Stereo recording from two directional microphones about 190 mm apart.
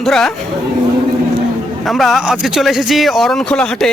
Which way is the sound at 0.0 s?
Centre (ahead or behind).